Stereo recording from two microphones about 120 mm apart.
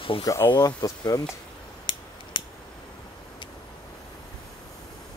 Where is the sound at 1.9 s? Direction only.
40° left (ahead or behind).